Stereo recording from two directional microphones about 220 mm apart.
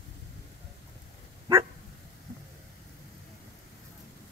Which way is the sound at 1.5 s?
15° right (ahead or behind).